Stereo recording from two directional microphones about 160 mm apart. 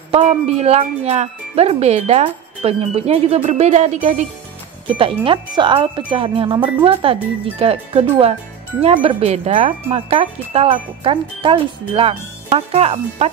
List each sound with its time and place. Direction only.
0.1 s speech: 40° right (ahead or behind)
4.8 s speech: 35° right (ahead or behind)